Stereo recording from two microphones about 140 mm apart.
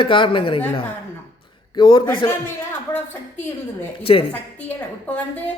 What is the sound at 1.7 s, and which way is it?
Speech, 35° left (ahead or behind).